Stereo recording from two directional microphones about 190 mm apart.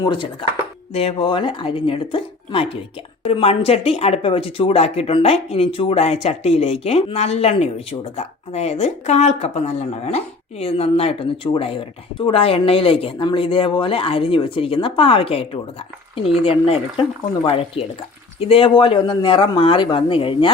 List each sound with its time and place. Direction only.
0.0 s speech: 25° left (ahead or behind)